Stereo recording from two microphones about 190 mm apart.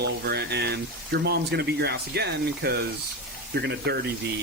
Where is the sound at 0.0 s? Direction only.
60° right (ahead or behind).